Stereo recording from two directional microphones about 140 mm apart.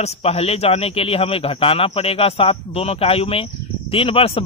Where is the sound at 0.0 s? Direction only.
45° left (ahead or behind).